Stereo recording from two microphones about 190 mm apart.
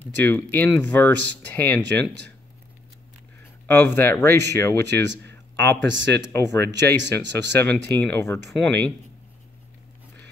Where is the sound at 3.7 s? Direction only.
10° left (ahead or behind).